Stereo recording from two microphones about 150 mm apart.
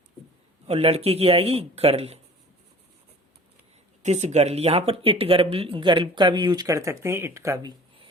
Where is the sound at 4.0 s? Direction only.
50° right (ahead or behind).